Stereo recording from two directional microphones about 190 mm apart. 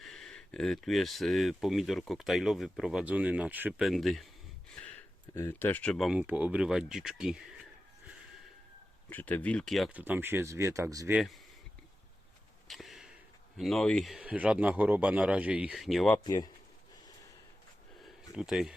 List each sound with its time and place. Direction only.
0.0 s speech: centre (ahead or behind)
9.0 s speech: 10° left (ahead or behind)
10.0 s speech: 10° right (ahead or behind)
12.6 s a sound: centre (ahead or behind)
13.6 s speech: centre (ahead or behind)
16.1 s speech: 20° left (ahead or behind)
18.3 s speech: centre (ahead or behind)